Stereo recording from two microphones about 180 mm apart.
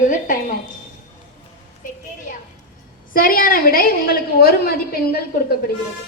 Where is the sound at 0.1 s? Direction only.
45° left (ahead or behind).